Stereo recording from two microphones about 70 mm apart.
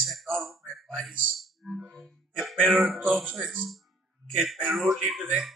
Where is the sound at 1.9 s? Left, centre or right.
Centre.